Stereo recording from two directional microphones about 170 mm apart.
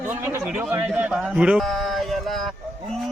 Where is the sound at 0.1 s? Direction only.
15° right (ahead or behind).